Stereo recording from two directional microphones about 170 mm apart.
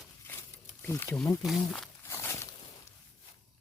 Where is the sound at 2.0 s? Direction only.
15° left (ahead or behind).